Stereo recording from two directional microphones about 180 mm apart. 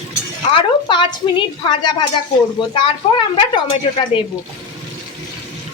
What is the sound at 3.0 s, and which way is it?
Speech, 30° left (ahead or behind).